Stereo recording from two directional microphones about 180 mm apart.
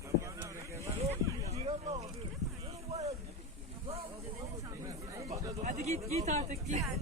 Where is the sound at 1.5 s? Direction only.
35° right (ahead or behind).